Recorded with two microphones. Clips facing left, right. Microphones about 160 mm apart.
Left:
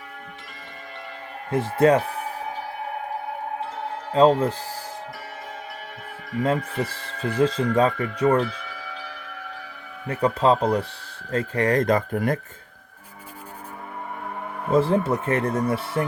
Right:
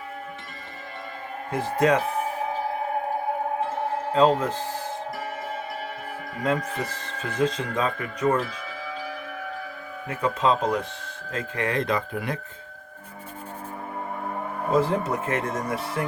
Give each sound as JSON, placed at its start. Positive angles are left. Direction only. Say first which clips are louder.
{"t": 1.5, "sound": "speech", "louder": "left 4 dB", "side_deg": 30}
{"t": 4.1, "sound": "speech", "louder": "left 3 dB", "side_deg": 35}
{"t": 6.4, "sound": "speech", "louder": "left 2 dB", "side_deg": 30}
{"t": 10.1, "sound": "speech", "louder": "left 3 dB", "side_deg": 35}
{"t": 14.8, "sound": "speech", "louder": "left 4 dB", "side_deg": 30}